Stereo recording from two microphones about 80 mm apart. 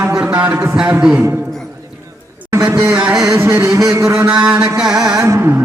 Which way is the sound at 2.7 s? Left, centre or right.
Right.